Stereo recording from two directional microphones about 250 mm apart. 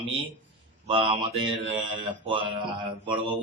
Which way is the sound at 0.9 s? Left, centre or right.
Right.